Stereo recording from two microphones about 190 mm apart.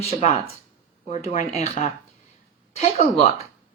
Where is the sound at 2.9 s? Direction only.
30° left (ahead or behind).